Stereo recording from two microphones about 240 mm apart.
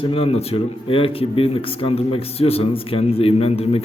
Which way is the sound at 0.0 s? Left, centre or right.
Left.